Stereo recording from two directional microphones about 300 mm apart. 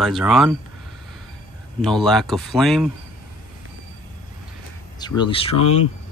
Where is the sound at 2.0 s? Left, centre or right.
Centre.